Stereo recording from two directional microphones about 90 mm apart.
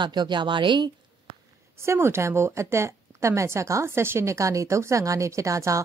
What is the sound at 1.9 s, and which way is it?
Speech, 30° right (ahead or behind).